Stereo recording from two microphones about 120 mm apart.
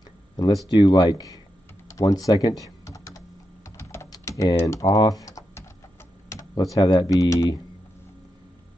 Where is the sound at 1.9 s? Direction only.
25° left (ahead or behind).